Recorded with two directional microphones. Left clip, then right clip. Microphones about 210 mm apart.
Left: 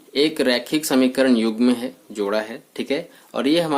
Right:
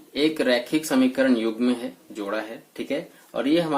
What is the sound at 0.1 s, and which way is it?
Speech, 40° left (ahead or behind).